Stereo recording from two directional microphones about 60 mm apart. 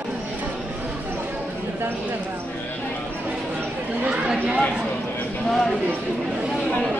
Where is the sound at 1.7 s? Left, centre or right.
Right.